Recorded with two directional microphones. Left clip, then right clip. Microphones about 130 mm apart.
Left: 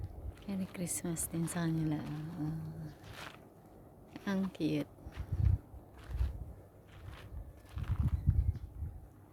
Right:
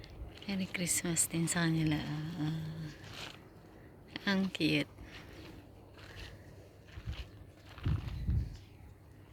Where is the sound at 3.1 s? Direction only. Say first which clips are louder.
Right 1 dB; 15° left (ahead or behind).